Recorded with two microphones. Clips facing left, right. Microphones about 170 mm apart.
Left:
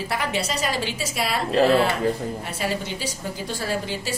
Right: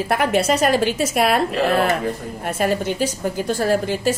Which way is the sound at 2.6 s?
50° right (ahead or behind).